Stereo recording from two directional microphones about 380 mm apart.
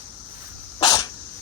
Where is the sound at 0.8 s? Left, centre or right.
Centre.